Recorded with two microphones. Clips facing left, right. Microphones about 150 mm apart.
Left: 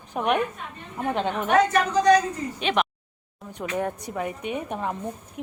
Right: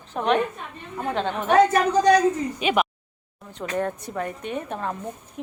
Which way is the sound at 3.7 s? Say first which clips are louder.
Right 2 dB; 10° left (ahead or behind).